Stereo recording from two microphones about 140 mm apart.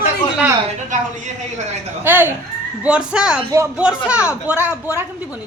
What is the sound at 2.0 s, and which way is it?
Speech, 15° right (ahead or behind).